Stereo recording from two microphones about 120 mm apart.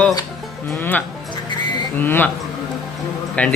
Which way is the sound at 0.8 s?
15° left (ahead or behind).